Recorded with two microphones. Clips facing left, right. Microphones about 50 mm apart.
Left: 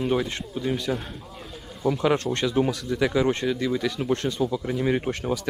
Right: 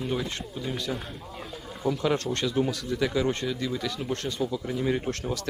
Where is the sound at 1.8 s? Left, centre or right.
Left.